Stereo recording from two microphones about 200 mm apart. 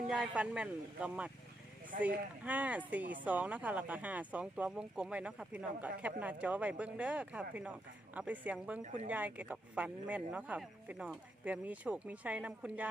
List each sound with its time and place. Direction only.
0.1 s speech: 5° right (ahead or behind)